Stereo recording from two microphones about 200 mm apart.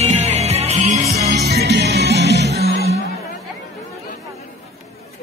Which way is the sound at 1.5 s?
55° right (ahead or behind).